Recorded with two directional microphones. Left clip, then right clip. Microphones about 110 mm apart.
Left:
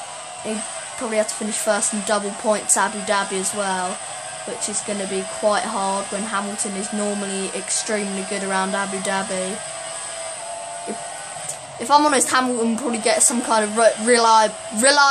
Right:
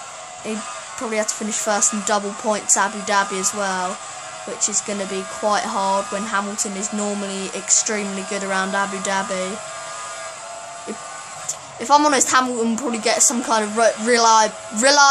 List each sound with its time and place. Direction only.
1.1 s a woman's voice: 25° right (ahead or behind)
11.8 s a woman's voice: 20° right (ahead or behind)